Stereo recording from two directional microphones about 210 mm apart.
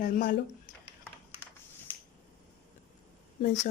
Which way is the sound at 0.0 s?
40° left (ahead or behind).